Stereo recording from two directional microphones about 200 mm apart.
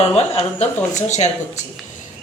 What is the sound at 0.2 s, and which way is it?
Speech, 30° left (ahead or behind).